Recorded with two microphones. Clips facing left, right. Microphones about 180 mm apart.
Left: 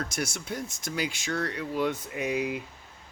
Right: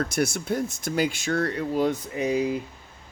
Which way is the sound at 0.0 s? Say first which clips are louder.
Right 8 dB; 60° right (ahead or behind).